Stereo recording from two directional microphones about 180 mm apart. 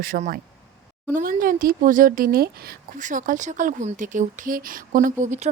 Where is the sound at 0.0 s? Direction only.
55° right (ahead or behind).